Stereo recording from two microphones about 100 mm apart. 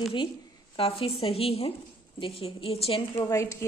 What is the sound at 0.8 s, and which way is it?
Speech, 65° left (ahead or behind).